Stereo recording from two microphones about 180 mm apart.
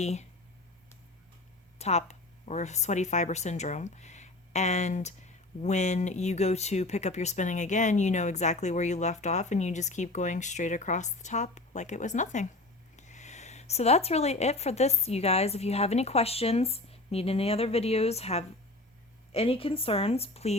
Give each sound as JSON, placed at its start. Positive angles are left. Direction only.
{"t": 0.0, "sound": "speech", "side_deg": 40}
{"t": 1.8, "sound": "speech", "side_deg": 35}